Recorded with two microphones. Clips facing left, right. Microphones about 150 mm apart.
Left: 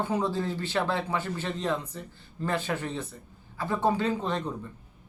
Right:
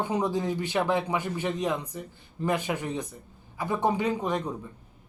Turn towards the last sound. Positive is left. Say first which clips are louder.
# right 1 dB
turn(degrees=-10)  # may be behind; listen again after turning